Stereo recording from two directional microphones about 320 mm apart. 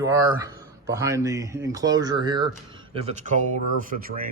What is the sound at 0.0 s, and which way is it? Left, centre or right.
Speech, centre.